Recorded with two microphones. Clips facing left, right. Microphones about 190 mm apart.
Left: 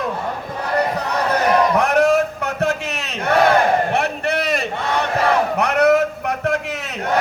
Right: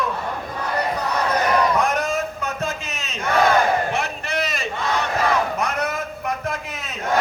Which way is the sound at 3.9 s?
60° left (ahead or behind).